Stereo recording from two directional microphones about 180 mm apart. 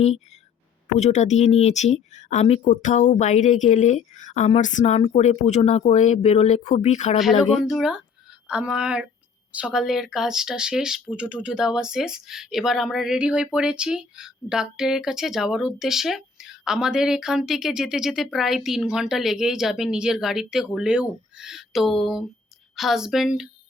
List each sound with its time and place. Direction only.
0.9 s speech: 40° left (ahead or behind)
7.5 s speech: centre (ahead or behind)